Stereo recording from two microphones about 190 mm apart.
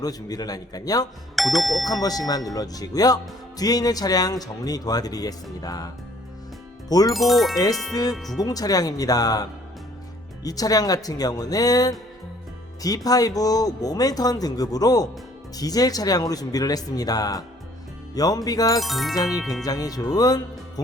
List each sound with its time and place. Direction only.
0.0 s speech: 20° left (ahead or behind)
1.4 s speech: centre (ahead or behind)
1.8 s speech: 20° left (ahead or behind)
7.1 s speech: centre (ahead or behind)
8.4 s speech: 20° left (ahead or behind)
13.1 s speech: 20° left (ahead or behind)
18.8 s speech: centre (ahead or behind)
19.1 s speech: 20° left (ahead or behind)
19.4 s speech: centre (ahead or behind)
19.6 s speech: 20° left (ahead or behind)